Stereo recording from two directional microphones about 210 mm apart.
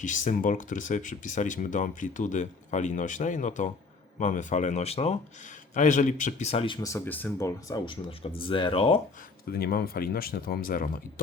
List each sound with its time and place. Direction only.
0.0 s speech: 35° left (ahead or behind)
9.5 s speech: 45° left (ahead or behind)